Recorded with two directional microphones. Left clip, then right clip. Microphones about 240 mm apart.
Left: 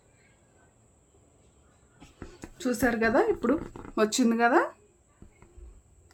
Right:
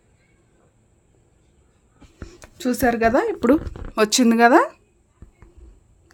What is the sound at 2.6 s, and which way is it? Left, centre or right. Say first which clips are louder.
A woman's voice: right 7 dB; right.